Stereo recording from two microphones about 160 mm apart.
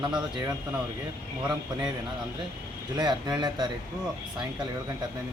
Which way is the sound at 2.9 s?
25° right (ahead or behind).